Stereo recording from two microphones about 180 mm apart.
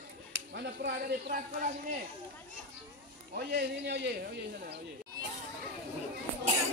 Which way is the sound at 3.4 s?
60° right (ahead or behind).